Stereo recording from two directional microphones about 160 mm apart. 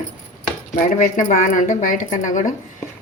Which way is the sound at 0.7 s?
50° left (ahead or behind).